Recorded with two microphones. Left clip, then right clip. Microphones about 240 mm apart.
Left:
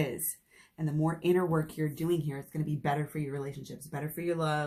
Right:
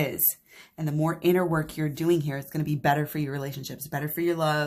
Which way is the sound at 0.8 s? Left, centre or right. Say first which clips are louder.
Right 5 dB; right.